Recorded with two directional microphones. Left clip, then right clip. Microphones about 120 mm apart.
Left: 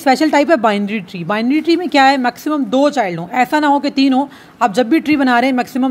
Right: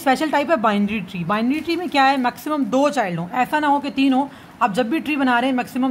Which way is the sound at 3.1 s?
40° left (ahead or behind).